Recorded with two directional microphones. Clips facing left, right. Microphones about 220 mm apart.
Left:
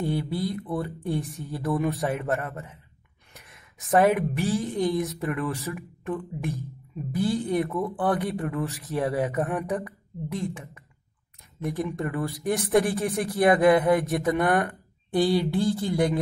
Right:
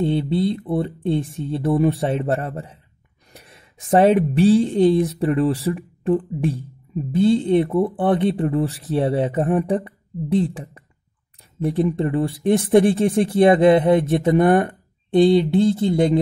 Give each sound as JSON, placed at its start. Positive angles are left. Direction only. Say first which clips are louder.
{"t": 0.0, "sound": "speech", "louder": "right 8 dB", "side_deg": -25}